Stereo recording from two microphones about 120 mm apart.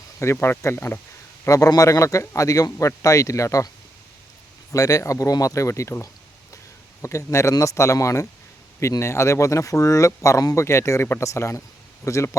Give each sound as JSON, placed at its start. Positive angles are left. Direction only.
{"t": 0.2, "sound": "a man's voice", "side_deg": 20}
{"t": 4.7, "sound": "a man's voice", "side_deg": 30}